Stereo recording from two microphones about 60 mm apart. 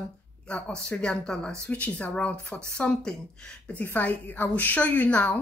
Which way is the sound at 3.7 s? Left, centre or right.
Left.